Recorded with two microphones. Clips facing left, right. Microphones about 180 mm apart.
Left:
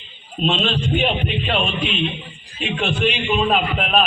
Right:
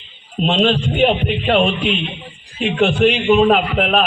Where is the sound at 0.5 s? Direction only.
45° right (ahead or behind).